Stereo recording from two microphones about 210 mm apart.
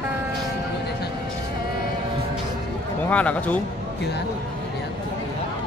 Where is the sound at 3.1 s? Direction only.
5° left (ahead or behind).